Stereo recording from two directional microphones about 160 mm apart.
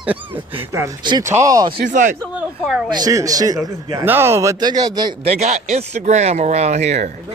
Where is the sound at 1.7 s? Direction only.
50° right (ahead or behind).